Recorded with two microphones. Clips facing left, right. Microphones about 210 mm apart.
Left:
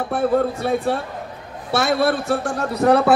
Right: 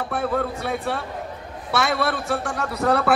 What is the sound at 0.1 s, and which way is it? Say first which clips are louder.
Speech: left 7 dB; 30° left (ahead or behind).